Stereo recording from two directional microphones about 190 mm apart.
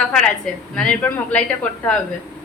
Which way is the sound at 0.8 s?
5° left (ahead or behind).